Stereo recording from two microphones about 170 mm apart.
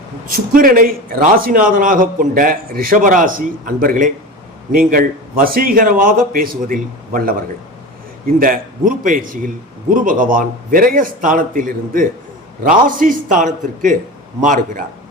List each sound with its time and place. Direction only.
0.3 s a man's voice: 55° right (ahead or behind)
8.4 s a man's voice: 55° right (ahead or behind)